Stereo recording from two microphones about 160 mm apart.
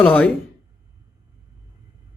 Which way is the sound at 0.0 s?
10° left (ahead or behind).